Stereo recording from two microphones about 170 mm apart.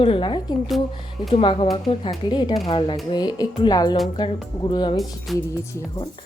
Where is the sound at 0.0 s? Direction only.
30° left (ahead or behind).